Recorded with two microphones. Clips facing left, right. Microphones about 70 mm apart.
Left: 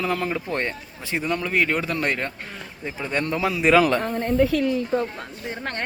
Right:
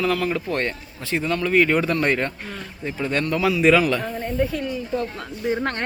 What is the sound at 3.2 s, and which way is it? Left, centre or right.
Speech, left.